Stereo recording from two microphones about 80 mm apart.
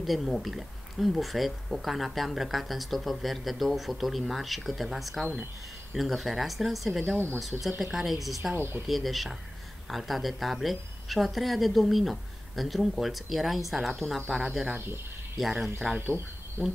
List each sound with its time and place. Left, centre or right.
0.0 s speech: centre
8.5 s speech: right
8.8 s speech: centre